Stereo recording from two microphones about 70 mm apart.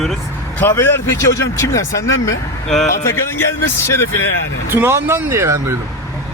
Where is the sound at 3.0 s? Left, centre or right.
Left.